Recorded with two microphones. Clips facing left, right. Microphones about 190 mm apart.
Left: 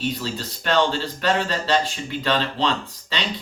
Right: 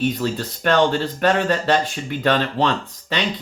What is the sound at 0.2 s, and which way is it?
Speech, 55° right (ahead or behind).